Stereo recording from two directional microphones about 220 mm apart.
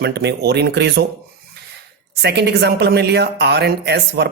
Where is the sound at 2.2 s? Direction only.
50° right (ahead or behind).